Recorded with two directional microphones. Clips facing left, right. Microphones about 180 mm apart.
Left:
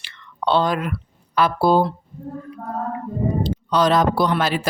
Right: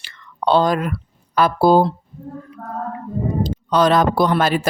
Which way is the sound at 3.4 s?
55° right (ahead or behind).